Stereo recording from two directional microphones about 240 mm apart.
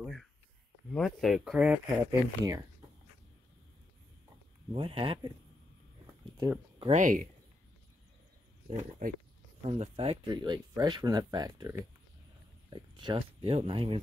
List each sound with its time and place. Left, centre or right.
0.0 s a sound: centre
0.9 s speech: centre
4.7 s speech: right
6.3 s speech: centre
6.9 s speech: right
9.0 s speech: right
9.6 s speech: right